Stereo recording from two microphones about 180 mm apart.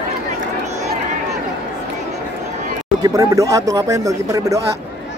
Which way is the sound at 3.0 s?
20° right (ahead or behind).